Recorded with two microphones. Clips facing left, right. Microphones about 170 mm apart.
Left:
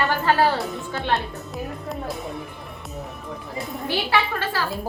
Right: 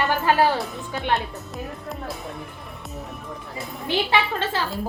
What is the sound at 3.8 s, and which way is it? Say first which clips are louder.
Speech: right 1 dB; 20° right (ahead or behind).